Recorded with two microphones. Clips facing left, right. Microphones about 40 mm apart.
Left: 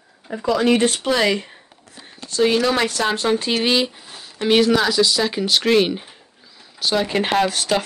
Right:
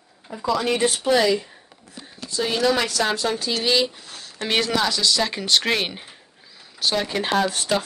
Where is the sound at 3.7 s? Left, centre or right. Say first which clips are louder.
Left 1 dB; centre.